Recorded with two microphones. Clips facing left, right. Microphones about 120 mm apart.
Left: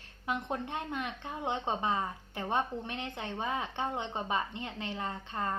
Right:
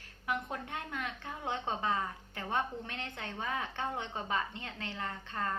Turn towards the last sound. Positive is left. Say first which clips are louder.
# left 2 dB
turn(degrees=20)  # may be behind; listen again after turning